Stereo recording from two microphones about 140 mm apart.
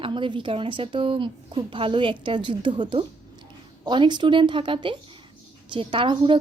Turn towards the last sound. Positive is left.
turn(degrees=-35)  # may be behind; listen again after turning